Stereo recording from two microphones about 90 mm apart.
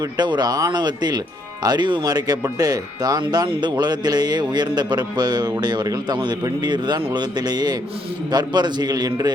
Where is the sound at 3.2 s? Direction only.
55° right (ahead or behind).